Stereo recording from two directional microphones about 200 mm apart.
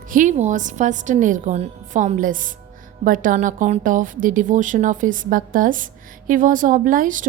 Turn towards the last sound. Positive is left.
turn(degrees=-40)  # may be behind; listen again after turning